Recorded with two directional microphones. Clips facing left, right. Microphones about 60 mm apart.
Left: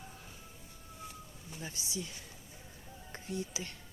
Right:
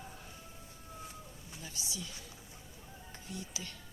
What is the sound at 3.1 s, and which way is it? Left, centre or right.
Speech, left.